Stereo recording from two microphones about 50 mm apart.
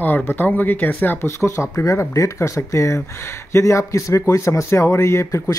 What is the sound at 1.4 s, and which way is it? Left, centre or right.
Speech, left.